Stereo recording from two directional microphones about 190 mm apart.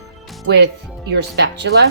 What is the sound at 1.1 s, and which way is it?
Speech, 65° right (ahead or behind).